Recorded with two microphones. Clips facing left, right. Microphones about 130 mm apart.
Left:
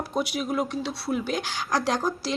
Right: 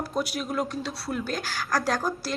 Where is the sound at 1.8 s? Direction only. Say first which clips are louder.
Left 1 dB; 10° right (ahead or behind).